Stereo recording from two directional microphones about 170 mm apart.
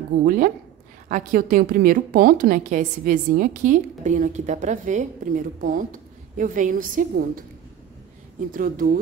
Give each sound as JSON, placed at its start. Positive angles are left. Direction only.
{"t": 0.2, "sound": "a woman's voice", "side_deg": -55}
{"t": 8.5, "sound": "speech", "side_deg": -55}